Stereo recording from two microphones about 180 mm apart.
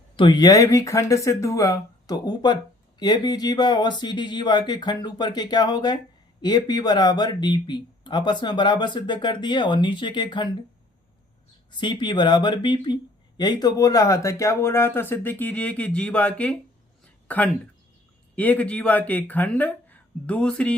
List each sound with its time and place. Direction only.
0.2 s speech: 25° left (ahead or behind)
11.8 s speech: 25° left (ahead or behind); by 20.7 s 5° left (ahead or behind)